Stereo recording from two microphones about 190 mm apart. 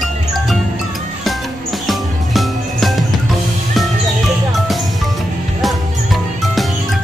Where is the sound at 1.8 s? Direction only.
Centre (ahead or behind).